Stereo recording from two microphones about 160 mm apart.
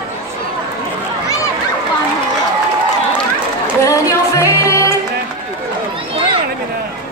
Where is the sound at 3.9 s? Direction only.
20° left (ahead or behind).